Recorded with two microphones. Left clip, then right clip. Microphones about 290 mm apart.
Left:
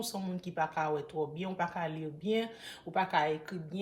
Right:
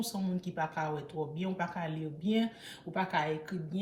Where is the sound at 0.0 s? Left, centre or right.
Left.